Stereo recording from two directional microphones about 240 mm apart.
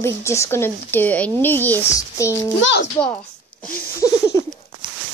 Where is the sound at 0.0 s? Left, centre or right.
Centre.